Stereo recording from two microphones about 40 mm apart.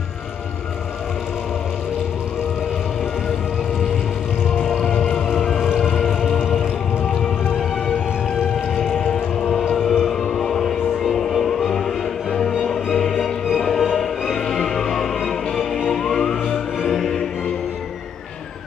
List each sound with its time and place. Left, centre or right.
4.6 s music: centre
4.8 s vehicle: centre
5.6 s siren: centre
6.5 s music: centre
9.8 s civil defense siren: centre
10.3 s music: centre
13.6 s music: centre